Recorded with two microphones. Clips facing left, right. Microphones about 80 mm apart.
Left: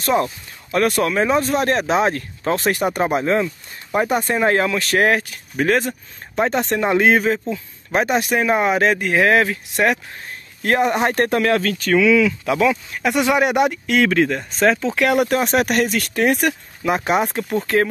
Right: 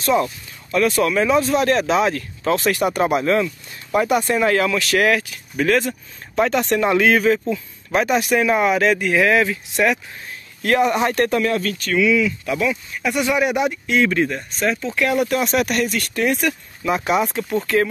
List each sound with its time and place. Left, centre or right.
0.1 s speech: left
2.6 s speech: left
3.0 s speech: left
6.3 s speech: left
13.3 s speech: left
15.3 s speech: left